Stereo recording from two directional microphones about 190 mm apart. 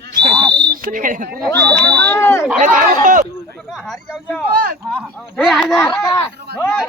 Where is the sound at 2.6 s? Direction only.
45° right (ahead or behind).